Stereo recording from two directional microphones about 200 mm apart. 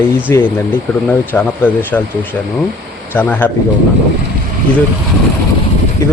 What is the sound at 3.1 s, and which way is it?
Speech, 10° left (ahead or behind).